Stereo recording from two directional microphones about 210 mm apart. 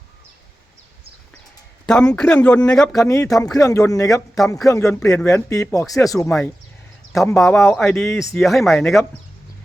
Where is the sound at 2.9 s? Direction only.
15° left (ahead or behind).